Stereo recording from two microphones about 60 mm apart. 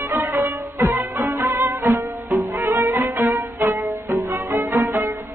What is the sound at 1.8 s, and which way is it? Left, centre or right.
Music, right.